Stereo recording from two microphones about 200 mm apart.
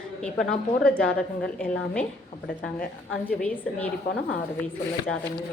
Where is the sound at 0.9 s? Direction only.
45° left (ahead or behind).